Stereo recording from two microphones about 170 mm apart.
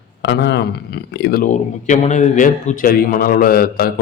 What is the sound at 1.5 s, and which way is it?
A man's voice, 45° left (ahead or behind).